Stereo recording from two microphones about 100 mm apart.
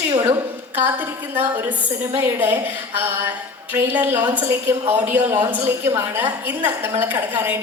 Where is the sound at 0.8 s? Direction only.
20° right (ahead or behind).